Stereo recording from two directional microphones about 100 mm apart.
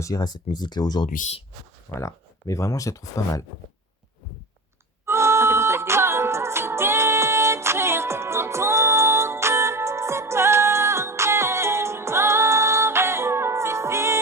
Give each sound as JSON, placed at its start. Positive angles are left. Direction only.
{"t": 0.0, "sound": "speech", "side_deg": 40}
{"t": 1.0, "sound": "speech", "side_deg": 85}
{"t": 2.0, "sound": "speech", "side_deg": 30}
{"t": 5.0, "sound": "music", "side_deg": -25}